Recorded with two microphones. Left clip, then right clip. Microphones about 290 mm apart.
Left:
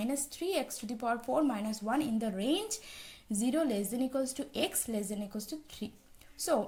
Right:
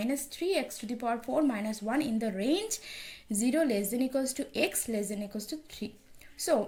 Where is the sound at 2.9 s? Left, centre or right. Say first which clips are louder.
Right 5 dB; left.